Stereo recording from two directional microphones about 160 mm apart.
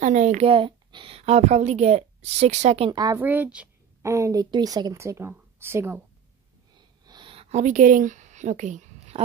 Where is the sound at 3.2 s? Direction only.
10° right (ahead or behind).